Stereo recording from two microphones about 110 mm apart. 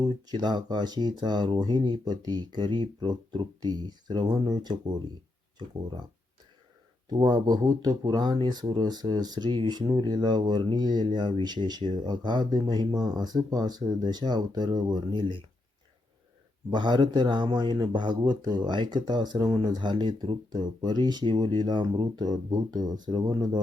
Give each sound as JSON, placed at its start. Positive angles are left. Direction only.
{"t": 0.0, "sound": "speech", "side_deg": -40}
{"t": 7.1, "sound": "speech", "side_deg": -40}
{"t": 16.6, "sound": "speech", "side_deg": -40}